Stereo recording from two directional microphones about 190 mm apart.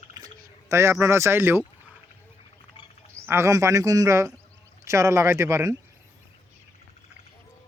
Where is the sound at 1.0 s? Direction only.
15° right (ahead or behind).